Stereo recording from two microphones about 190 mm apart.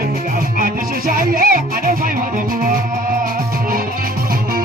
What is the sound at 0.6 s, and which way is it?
Music, 45° right (ahead or behind).